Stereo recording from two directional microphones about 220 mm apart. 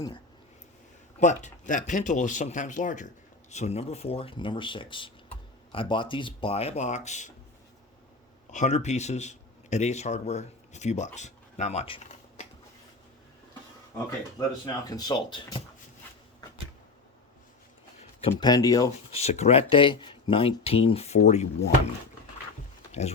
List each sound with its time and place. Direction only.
1.2 s speech: 35° left (ahead or behind)
8.4 s speech: 35° left (ahead or behind)
14.3 s speech: 15° left (ahead or behind)
18.2 s speech: 25° left (ahead or behind)
19.1 s speech: 30° left (ahead or behind)
22.9 s a sound: 30° left (ahead or behind)